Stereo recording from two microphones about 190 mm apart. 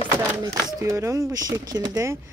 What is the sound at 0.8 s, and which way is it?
Speech, 15° right (ahead or behind).